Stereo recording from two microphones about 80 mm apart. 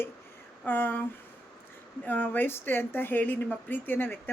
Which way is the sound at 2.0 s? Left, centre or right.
Left.